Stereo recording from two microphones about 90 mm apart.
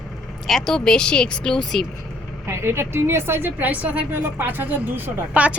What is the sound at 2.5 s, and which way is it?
A woman's voice, 30° right (ahead or behind).